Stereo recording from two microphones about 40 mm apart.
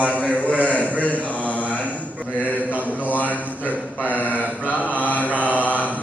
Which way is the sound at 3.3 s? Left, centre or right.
Right.